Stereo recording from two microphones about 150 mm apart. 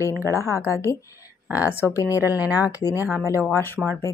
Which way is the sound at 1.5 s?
10° right (ahead or behind).